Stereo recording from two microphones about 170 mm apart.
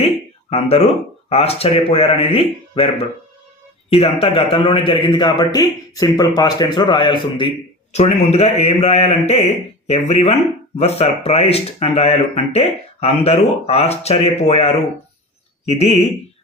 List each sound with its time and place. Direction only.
0.5 s a man's voice: 40° left (ahead or behind)
7.9 s speech: 40° left (ahead or behind)